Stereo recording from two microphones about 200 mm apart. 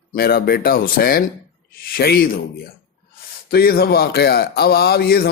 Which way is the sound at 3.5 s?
50° left (ahead or behind).